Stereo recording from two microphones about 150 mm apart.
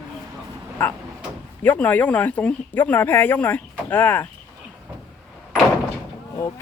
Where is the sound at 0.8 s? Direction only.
10° left (ahead or behind).